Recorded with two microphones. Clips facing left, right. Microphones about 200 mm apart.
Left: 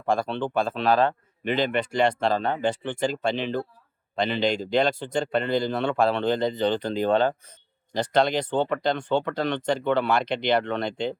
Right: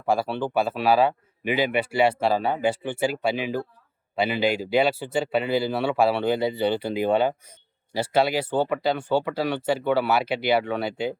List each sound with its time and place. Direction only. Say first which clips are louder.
0.0 s speech: right 1 dB; 5° right (ahead or behind)